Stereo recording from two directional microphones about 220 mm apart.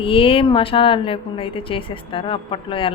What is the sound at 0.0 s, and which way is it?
A woman's voice, 25° left (ahead or behind).